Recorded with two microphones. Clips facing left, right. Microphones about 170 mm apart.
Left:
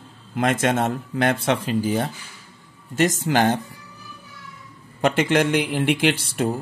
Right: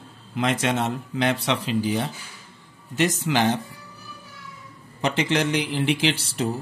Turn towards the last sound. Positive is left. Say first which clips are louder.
# left 3 dB
turn(degrees=55)  # may be behind; listen again after turning